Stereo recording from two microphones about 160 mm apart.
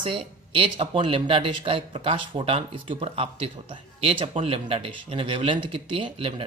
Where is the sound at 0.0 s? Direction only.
30° right (ahead or behind).